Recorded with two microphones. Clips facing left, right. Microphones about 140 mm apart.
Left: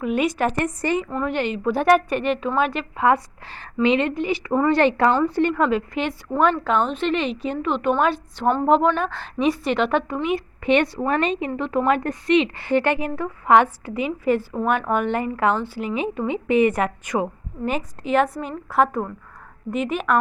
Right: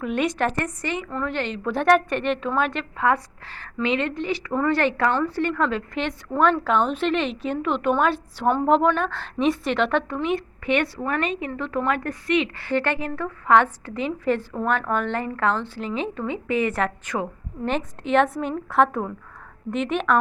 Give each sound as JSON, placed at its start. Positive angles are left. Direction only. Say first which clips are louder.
{"t": 0.0, "sound": "a woman's voice", "louder": "left 2 dB", "side_deg": 5}
{"t": 0.8, "sound": "a woman's voice", "louder": "left 6 dB", "side_deg": 35}
{"t": 1.1, "sound": "a woman's voice", "louder": "left 3 dB", "side_deg": 15}
{"t": 3.0, "sound": "a woman's voice", "louder": "left 3 dB", "side_deg": 20}
{"t": 10.6, "sound": "a woman's voice", "louder": "left 7 dB", "side_deg": 20}